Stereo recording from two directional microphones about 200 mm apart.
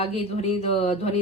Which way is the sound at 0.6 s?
30° left (ahead or behind).